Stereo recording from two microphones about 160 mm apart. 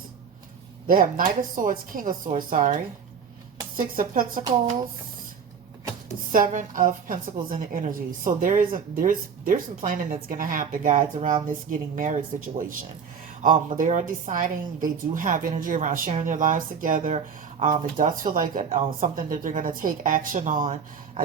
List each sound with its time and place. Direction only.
0.9 s a woman's voice: 60° right (ahead or behind)
6.3 s a woman's voice: 55° right (ahead or behind)